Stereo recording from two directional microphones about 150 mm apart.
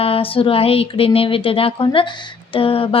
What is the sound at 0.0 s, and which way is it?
A woman's voice, 40° left (ahead or behind).